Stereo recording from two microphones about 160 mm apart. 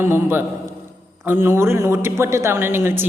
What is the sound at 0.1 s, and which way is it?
A woman's voice, 15° right (ahead or behind).